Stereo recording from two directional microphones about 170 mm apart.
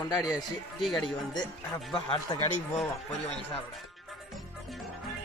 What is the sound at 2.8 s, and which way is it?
Speech, 35° left (ahead or behind).